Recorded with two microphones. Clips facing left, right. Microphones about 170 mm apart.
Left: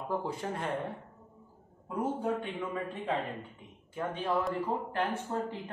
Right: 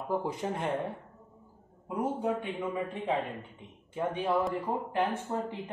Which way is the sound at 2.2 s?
20° right (ahead or behind).